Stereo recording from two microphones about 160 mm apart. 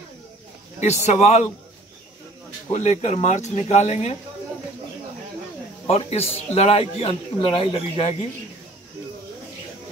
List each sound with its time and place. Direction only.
0.7 s speech: 45° left (ahead or behind)
2.7 s speech: 45° left (ahead or behind)
5.9 s a man's voice: 40° left (ahead or behind)